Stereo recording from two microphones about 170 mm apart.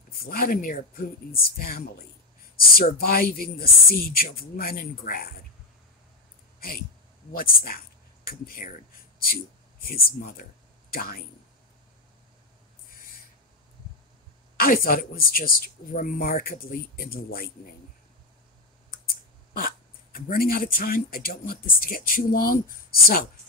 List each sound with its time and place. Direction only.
0.2 s speech: 60° left (ahead or behind)
7.3 s speech: 55° left (ahead or behind)
9.8 s speech: 60° left (ahead or behind)
14.6 s speech: 60° left (ahead or behind)
19.5 s speech: 60° left (ahead or behind)